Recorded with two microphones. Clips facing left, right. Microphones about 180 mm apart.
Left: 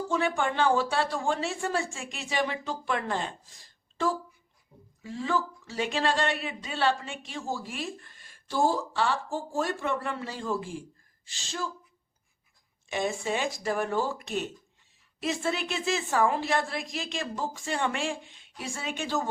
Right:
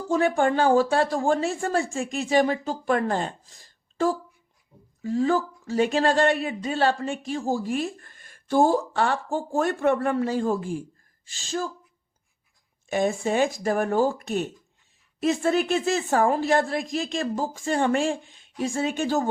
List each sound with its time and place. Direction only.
0.1 s speech: 45° right (ahead or behind)
5.0 s speech: 40° right (ahead or behind)
12.9 s speech: 45° right (ahead or behind)